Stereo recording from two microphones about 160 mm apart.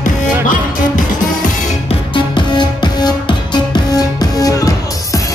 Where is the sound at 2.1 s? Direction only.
30° left (ahead or behind).